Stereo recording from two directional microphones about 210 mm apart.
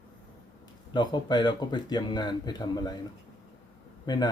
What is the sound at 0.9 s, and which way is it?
Speech, 20° left (ahead or behind).